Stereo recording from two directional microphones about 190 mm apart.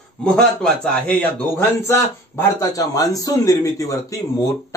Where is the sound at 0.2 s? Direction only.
5° left (ahead or behind).